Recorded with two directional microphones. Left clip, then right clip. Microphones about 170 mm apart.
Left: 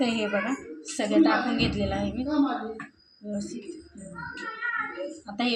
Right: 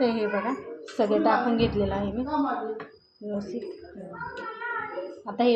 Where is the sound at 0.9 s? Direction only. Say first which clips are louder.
Even; 50° right (ahead or behind).